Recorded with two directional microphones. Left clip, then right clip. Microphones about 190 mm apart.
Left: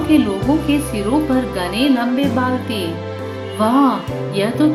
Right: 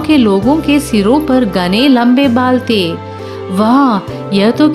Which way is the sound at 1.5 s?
60° right (ahead or behind).